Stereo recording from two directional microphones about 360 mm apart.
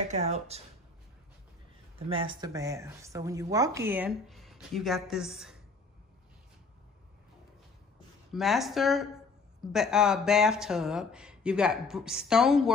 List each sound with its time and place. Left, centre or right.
0.1 s speech: centre
2.0 s speech: centre
8.3 s speech: centre